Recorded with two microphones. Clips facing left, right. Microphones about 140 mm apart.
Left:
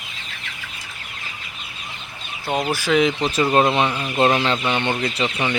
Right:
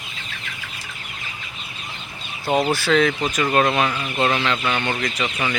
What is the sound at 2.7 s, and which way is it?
Speech, 10° left (ahead or behind).